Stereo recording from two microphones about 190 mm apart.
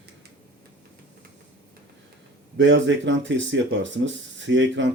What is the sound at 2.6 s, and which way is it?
Speech, 75° right (ahead or behind).